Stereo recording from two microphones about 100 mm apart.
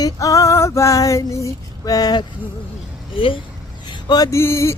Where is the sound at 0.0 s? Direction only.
35° left (ahead or behind).